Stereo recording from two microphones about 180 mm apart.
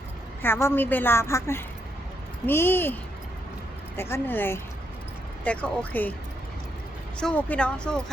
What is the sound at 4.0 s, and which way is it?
Speech, 15° left (ahead or behind).